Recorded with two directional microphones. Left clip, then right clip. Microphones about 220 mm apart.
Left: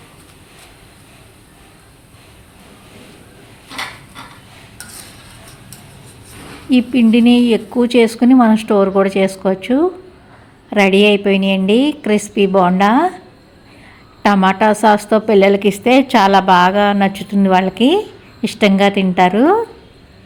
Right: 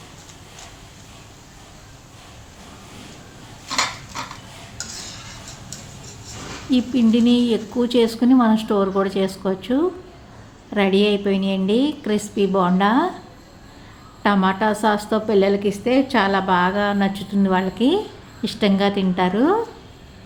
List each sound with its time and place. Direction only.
6.7 s speech: 25° left (ahead or behind)
14.2 s speech: 25° left (ahead or behind)